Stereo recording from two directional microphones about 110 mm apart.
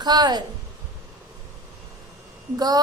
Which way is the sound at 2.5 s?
35° right (ahead or behind).